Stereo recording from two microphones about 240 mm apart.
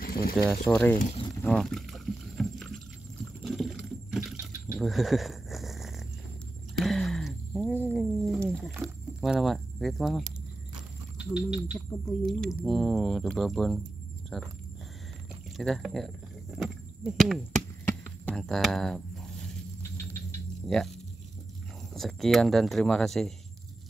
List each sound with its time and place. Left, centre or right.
0.0 s a sound: left
0.7 s speech: centre
0.9 s speech: left
1.4 s rowboat: centre
3.4 s a sound: centre
8.7 s speech: centre
15.5 s a sound: centre
20.6 s speech: centre
21.9 s speech: centre